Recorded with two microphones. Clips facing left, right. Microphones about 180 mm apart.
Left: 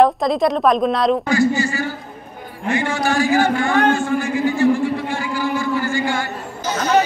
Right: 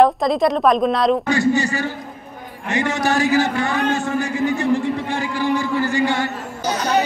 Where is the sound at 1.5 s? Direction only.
35° right (ahead or behind).